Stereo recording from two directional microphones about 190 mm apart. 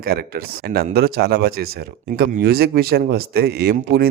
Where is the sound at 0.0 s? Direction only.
50° right (ahead or behind).